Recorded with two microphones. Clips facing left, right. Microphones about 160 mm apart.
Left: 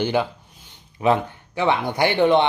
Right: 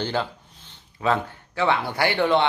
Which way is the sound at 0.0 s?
15° left (ahead or behind).